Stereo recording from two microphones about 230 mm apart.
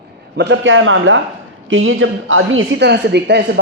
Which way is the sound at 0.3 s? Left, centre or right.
Right.